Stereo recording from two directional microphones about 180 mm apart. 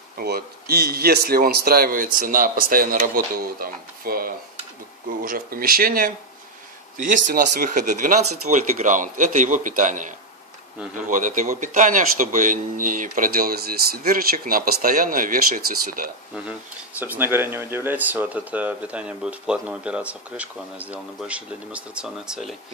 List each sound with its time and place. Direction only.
0.2 s a man's voice: 60° right (ahead or behind)
17.0 s speech: 10° right (ahead or behind)